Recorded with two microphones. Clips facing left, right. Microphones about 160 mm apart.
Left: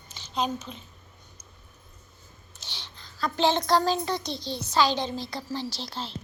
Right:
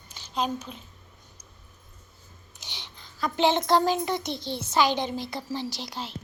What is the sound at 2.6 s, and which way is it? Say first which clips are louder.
A child's voice: even; 20° right (ahead or behind).